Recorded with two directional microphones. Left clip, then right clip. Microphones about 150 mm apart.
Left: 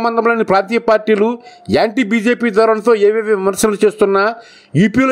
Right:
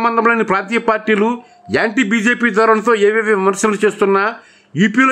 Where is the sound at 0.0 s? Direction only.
25° left (ahead or behind).